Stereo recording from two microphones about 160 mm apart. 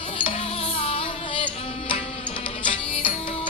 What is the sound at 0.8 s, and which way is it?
Music, 35° left (ahead or behind).